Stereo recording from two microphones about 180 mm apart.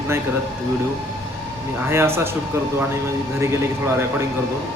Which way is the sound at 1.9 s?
15° right (ahead or behind).